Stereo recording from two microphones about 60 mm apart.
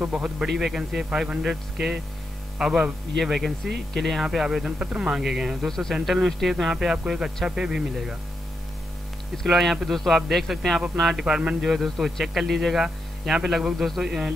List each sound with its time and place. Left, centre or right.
0.0 s a man's voice: centre
5.7 s a man's voice: centre
5.9 s a man's voice: centre
9.5 s a man's voice: centre